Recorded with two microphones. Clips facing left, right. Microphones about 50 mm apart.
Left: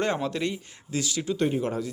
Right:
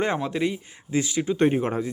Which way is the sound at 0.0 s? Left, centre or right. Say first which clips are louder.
Right 2 dB; centre.